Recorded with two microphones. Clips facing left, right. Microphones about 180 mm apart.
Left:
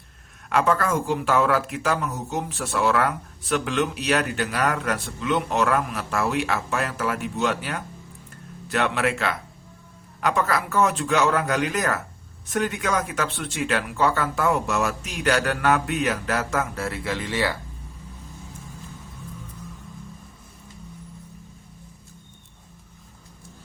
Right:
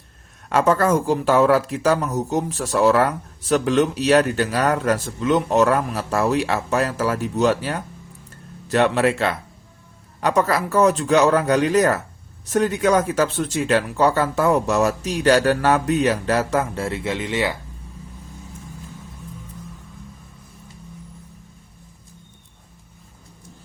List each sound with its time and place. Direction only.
0.5 s speech: 40° right (ahead or behind); by 17.6 s 20° right (ahead or behind)